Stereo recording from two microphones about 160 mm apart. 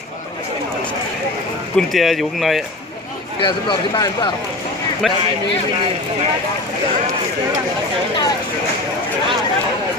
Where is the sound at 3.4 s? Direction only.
30° left (ahead or behind).